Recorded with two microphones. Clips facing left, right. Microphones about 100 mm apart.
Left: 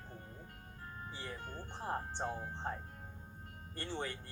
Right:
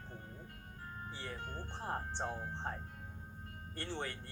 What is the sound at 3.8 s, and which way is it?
Speech, 15° left (ahead or behind).